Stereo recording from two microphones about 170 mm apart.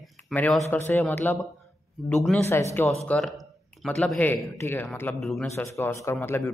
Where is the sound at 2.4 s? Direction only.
15° left (ahead or behind).